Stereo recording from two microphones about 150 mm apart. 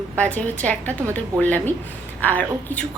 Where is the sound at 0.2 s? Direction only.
10° left (ahead or behind).